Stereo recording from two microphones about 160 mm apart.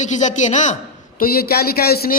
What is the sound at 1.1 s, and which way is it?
A woman's voice, 70° left (ahead or behind).